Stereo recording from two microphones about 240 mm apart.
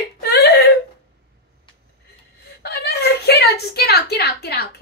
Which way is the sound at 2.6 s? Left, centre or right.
Left.